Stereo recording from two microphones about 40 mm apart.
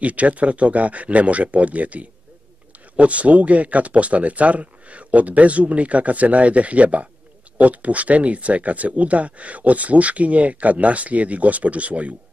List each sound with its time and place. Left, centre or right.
0.0 s speech: right